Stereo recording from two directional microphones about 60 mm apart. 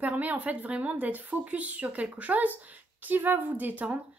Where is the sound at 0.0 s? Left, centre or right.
Right.